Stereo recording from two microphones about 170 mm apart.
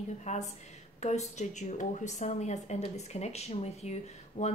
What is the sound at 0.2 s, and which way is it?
A woman's voice, 45° left (ahead or behind).